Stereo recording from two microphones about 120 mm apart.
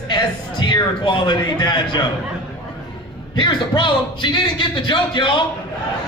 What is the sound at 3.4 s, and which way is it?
A man's voice, 40° left (ahead or behind).